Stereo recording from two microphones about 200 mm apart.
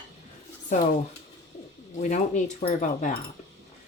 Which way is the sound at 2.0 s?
35° left (ahead or behind).